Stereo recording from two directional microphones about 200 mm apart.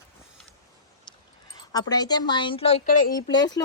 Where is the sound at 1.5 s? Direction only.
20° left (ahead or behind).